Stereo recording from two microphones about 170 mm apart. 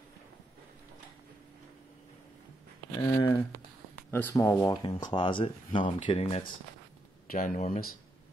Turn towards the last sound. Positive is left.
turn(degrees=50)  # may be behind; listen again after turning